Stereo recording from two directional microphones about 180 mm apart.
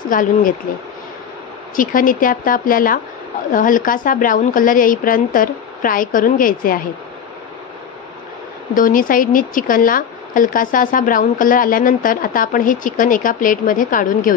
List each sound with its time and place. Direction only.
0.1 s speech: 50° left (ahead or behind)
1.8 s speech: 50° left (ahead or behind)
8.7 s speech: 50° left (ahead or behind)